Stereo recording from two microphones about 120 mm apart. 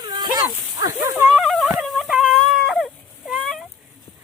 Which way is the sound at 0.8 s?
25° right (ahead or behind).